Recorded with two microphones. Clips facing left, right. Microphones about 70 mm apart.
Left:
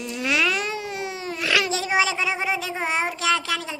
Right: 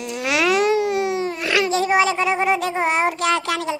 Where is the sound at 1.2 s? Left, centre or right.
Right.